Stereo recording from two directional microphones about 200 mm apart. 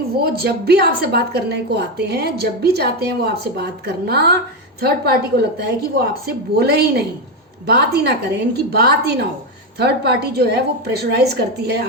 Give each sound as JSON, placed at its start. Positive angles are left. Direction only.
{"t": 0.2, "sound": "a woman's voice", "side_deg": -50}
{"t": 5.5, "sound": "a woman's voice", "side_deg": -55}